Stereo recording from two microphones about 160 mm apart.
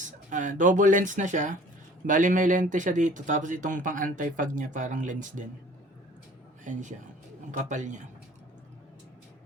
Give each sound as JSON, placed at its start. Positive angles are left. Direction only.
{"t": 0.0, "sound": "speech", "side_deg": -50}
{"t": 6.7, "sound": "speech", "side_deg": -50}